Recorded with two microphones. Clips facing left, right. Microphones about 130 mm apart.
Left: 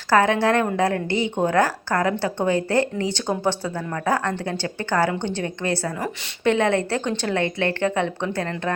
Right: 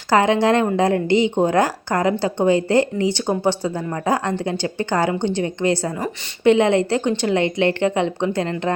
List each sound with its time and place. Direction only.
0.1 s a woman's voice: 15° right (ahead or behind)